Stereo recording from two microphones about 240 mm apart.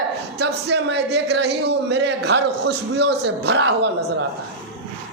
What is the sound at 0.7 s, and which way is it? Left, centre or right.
Speech, right.